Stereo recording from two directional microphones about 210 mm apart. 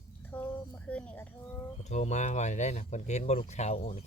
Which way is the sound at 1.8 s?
35° left (ahead or behind).